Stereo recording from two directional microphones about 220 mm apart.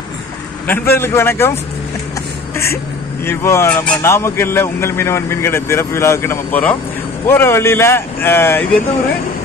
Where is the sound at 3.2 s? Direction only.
10° left (ahead or behind).